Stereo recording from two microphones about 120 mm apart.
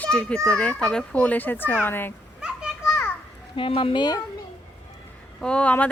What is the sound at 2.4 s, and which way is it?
Children playing, 5° right (ahead or behind).